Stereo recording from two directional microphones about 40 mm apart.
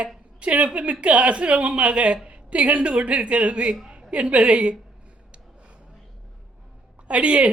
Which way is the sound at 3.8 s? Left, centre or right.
Centre.